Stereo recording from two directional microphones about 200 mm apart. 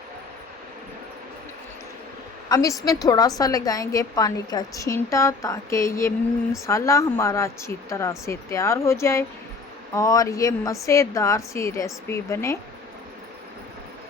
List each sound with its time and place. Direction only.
2.5 s a woman's voice: 15° left (ahead or behind)